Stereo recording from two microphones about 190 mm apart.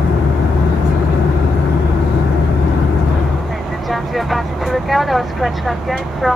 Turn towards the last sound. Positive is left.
turn(degrees=0)  # may be behind; listen again after turning